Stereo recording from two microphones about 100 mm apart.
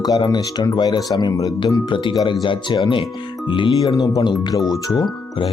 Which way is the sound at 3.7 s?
40° left (ahead or behind).